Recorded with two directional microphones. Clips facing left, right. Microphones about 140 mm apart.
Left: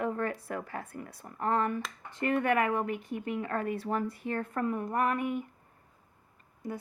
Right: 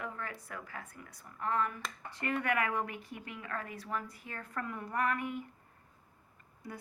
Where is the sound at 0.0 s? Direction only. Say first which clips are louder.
Left 10 dB; 45° left (ahead or behind).